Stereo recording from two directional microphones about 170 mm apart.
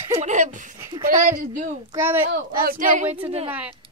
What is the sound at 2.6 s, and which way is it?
Speech, 50° right (ahead or behind).